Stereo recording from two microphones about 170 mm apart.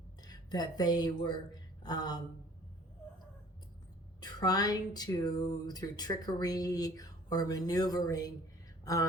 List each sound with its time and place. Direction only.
0.2 s speech: 25° left (ahead or behind)
4.2 s speech: 25° left (ahead or behind)